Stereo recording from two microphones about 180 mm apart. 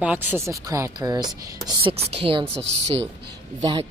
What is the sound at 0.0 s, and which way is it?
Speech, 10° right (ahead or behind).